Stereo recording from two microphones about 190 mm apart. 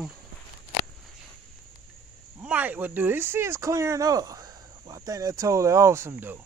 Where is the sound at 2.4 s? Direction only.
5° right (ahead or behind).